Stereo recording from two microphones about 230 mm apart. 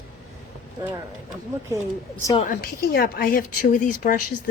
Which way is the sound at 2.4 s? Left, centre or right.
Left.